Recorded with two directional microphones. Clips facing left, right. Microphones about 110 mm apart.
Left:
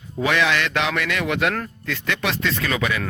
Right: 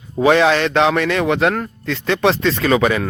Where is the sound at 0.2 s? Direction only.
35° right (ahead or behind).